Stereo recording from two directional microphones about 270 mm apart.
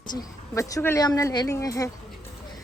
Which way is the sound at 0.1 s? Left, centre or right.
Centre.